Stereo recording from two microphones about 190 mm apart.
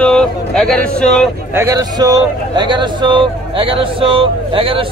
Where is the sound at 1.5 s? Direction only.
15° right (ahead or behind).